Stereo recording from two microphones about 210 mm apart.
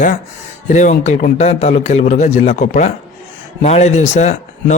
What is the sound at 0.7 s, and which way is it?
Speech, 35° left (ahead or behind).